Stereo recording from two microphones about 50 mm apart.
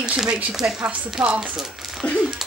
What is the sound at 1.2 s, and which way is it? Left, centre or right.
Speech, centre.